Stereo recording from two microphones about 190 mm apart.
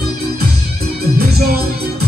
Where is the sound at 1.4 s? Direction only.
55° right (ahead or behind).